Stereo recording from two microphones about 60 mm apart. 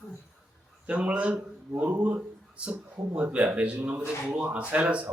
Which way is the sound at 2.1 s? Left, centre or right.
Centre.